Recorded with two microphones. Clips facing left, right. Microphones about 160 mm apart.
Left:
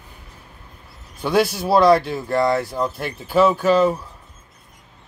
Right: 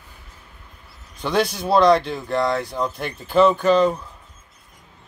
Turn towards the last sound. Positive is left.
turn(degrees=5)  # may be behind; listen again after turning